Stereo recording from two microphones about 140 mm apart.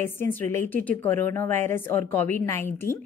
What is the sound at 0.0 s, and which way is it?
Speech, 15° left (ahead or behind).